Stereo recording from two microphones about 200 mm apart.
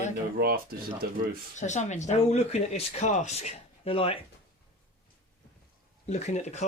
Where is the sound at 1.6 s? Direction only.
35° left (ahead or behind).